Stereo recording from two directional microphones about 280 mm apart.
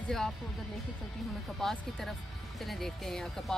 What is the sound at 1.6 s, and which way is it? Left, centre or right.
Speech, centre.